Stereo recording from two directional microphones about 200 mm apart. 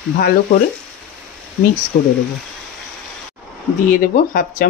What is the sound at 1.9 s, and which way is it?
Speech, 50° left (ahead or behind).